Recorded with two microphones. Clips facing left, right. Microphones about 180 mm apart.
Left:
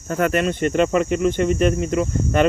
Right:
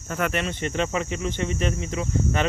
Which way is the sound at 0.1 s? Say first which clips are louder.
Left 7 dB; 40° left (ahead or behind).